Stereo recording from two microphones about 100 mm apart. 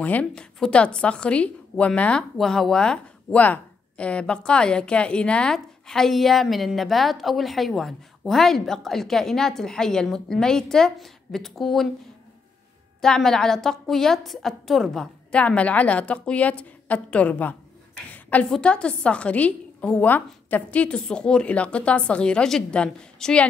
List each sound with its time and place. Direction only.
0.0 s a woman's voice: 15° left (ahead or behind)
13.0 s a woman's voice: 5° left (ahead or behind)
18.1 s a sound: 15° left (ahead or behind)
18.5 s a woman's voice: 10° left (ahead or behind)